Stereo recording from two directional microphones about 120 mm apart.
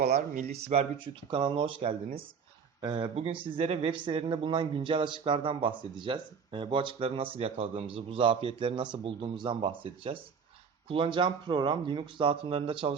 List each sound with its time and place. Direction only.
0.3 s speech: 60° right (ahead or behind); by 3.1 s 40° right (ahead or behind)
3.2 s speech: 50° right (ahead or behind)